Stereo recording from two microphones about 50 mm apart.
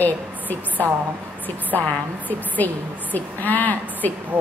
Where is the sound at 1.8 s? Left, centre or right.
Left.